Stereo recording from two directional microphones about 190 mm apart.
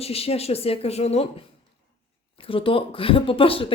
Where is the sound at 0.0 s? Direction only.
30° left (ahead or behind).